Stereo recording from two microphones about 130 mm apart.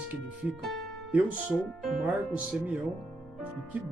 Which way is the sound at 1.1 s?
10° right (ahead or behind).